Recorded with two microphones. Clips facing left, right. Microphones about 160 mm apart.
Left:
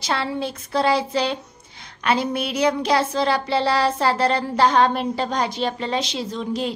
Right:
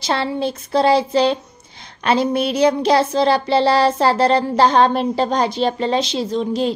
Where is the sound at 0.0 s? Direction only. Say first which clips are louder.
Right 4 dB; 30° right (ahead or behind).